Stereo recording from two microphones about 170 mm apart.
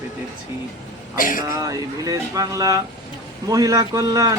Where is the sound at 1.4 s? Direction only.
20° right (ahead or behind).